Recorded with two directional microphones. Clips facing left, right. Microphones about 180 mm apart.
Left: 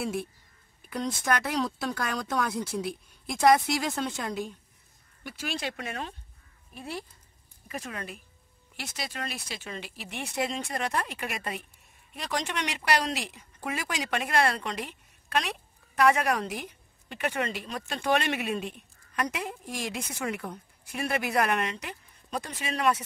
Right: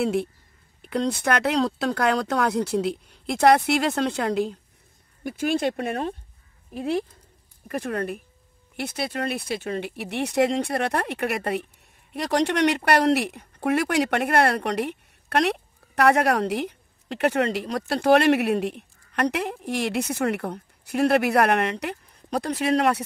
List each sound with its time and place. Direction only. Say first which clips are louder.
0.0 s speech: right 8 dB; 65° right (ahead or behind)
5.2 s speech: right 11 dB; 50° right (ahead or behind)
6.7 s speech: right 13 dB; 75° right (ahead or behind)
7.6 s speech: right 10 dB; 55° right (ahead or behind)